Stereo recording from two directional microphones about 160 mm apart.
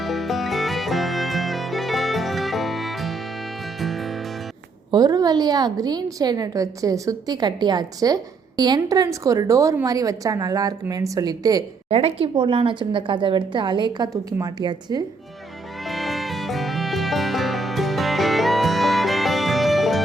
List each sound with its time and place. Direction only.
0.0 s music: centre (ahead or behind)
4.9 s a woman's voice: 25° right (ahead or behind)
11.9 s a woman's voice: 40° right (ahead or behind)
15.9 s music: centre (ahead or behind)